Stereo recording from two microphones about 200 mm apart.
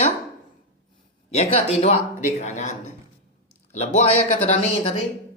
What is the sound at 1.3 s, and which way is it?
A woman's voice, 30° left (ahead or behind).